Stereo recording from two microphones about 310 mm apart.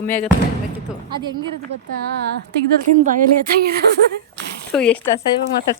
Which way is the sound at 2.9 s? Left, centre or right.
Right.